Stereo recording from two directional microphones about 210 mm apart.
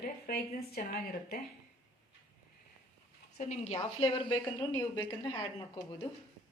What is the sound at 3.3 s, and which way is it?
A woman's voice, 35° left (ahead or behind).